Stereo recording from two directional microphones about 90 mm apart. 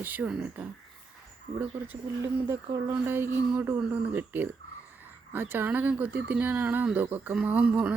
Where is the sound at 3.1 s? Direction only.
25° right (ahead or behind).